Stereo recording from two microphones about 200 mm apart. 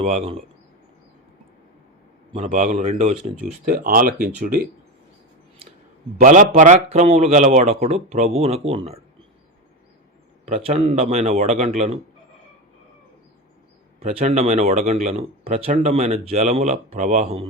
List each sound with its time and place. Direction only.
0.0 s speech: 30° right (ahead or behind)
2.5 s speech: 40° right (ahead or behind)
3.4 s speech: 45° right (ahead or behind)
6.1 s speech: 45° right (ahead or behind)
10.4 s speech: 30° right (ahead or behind)
14.0 s speech: 35° right (ahead or behind)